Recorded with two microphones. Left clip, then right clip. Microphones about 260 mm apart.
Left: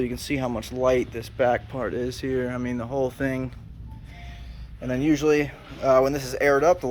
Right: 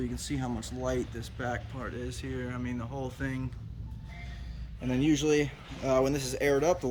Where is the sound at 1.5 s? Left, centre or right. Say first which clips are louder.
Left 12 dB; left.